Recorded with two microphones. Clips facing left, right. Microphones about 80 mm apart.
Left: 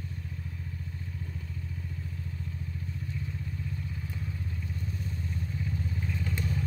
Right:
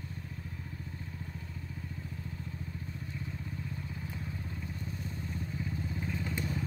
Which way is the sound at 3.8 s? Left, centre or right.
Right.